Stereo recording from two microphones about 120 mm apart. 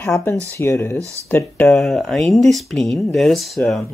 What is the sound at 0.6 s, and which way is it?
Speech, 20° left (ahead or behind).